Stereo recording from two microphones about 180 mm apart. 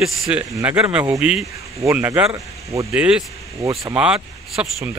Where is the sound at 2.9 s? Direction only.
5° right (ahead or behind).